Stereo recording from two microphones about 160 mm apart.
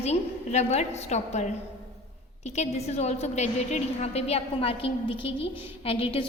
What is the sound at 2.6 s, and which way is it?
A woman's voice, 40° left (ahead or behind).